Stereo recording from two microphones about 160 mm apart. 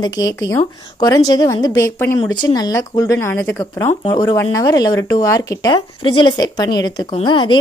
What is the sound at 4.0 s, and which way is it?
A woman's voice, 30° left (ahead or behind).